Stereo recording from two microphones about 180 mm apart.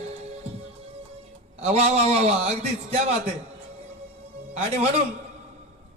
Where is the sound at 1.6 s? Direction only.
35° right (ahead or behind).